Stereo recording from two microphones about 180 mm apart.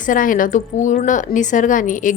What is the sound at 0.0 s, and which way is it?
A woman's voice, 50° left (ahead or behind).